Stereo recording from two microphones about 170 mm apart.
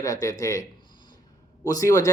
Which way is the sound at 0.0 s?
20° left (ahead or behind).